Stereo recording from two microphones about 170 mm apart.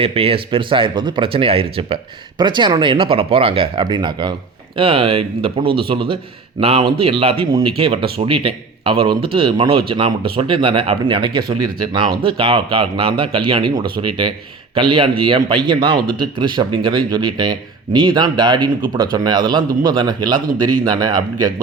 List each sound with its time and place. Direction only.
0.0 s speech: 35° right (ahead or behind)